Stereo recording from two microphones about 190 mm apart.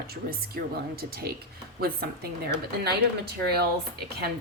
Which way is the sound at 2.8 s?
55° right (ahead or behind).